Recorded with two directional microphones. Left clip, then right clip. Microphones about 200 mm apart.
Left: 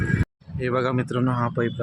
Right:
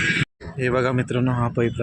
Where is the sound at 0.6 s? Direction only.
10° right (ahead or behind).